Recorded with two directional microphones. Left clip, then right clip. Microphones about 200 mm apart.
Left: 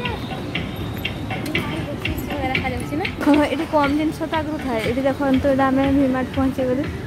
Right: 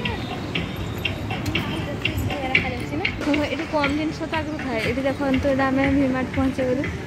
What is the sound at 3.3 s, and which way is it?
A woman's voice, 35° left (ahead or behind).